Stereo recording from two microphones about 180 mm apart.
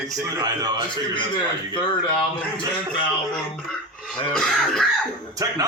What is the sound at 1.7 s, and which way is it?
Speech, 25° left (ahead or behind).